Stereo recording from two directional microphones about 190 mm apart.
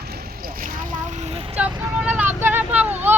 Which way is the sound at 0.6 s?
45° right (ahead or behind).